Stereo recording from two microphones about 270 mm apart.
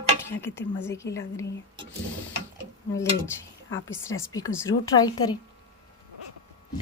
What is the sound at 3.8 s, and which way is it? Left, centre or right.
A woman's voice, centre.